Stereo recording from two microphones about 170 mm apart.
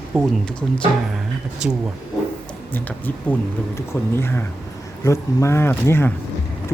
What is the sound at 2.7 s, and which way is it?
Speech, 10° left (ahead or behind).